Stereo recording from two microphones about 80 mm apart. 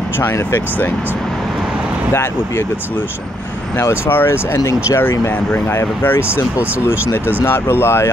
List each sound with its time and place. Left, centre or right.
0.2 s speech: left
3.7 s speech: left